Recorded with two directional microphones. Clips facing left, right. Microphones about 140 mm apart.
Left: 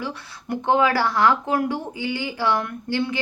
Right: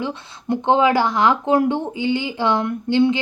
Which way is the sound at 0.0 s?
20° right (ahead or behind).